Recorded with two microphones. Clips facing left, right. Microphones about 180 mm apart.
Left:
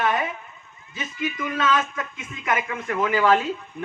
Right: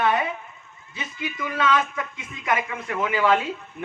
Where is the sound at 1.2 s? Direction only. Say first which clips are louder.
Left 1 dB; 25° right (ahead or behind).